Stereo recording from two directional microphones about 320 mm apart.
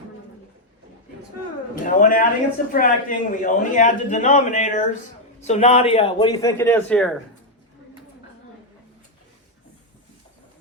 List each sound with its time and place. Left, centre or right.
1.7 s a man's voice: left; by 7.1 s centre